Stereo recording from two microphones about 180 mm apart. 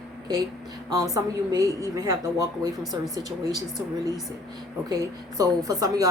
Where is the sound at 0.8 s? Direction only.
20° right (ahead or behind).